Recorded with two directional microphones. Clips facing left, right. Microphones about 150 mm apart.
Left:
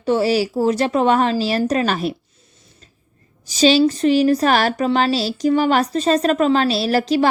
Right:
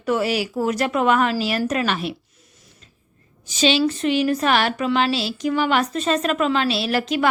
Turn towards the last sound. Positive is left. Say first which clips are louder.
# left 4 dB
turn(degrees=35)  # may be behind; listen again after turning